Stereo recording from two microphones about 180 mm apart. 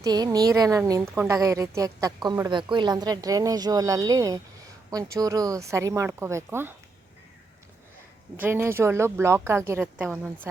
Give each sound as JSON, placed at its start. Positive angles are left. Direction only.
{"t": 0.0, "sound": "a woman's voice", "side_deg": -20}
{"t": 8.4, "sound": "speech", "side_deg": -10}